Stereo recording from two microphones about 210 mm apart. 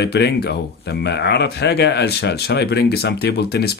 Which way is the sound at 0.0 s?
50° left (ahead or behind).